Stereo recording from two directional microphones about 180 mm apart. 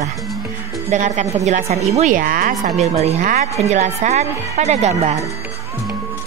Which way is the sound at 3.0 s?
35° right (ahead or behind).